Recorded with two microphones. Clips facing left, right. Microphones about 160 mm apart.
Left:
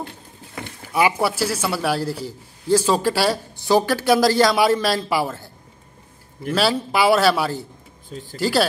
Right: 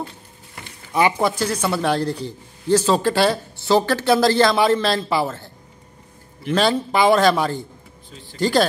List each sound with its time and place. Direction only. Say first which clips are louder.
0.9 s speech: right 1 dB; 10° left (ahead or behind)
6.5 s speech: right 2 dB; 5° left (ahead or behind)
8.1 s speech: left 8 dB; 45° left (ahead or behind)
8.4 s speech: right 2 dB; 5° left (ahead or behind)